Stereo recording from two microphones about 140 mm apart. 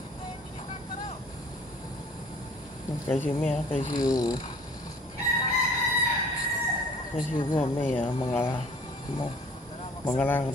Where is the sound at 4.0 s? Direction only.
25° left (ahead or behind).